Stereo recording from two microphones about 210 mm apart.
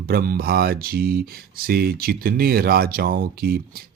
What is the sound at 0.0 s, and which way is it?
Speech, 45° right (ahead or behind).